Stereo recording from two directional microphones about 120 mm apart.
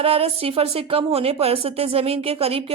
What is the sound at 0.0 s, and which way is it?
A woman's voice, 55° right (ahead or behind).